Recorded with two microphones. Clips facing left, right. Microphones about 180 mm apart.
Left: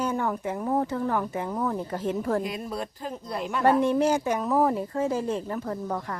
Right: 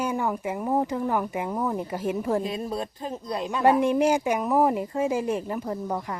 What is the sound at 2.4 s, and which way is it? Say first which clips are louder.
Speech: right 2 dB; 25° right (ahead or behind).